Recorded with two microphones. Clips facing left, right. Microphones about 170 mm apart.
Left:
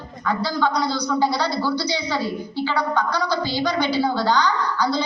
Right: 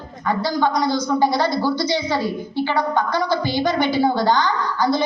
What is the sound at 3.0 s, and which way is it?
Speech, 50° right (ahead or behind).